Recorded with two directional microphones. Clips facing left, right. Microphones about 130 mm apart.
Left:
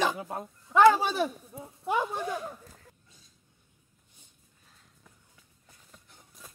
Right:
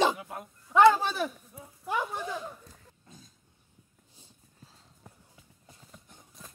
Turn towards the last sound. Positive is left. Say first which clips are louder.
# right 5 dB
turn(degrees=-30)  # may be behind; listen again after turning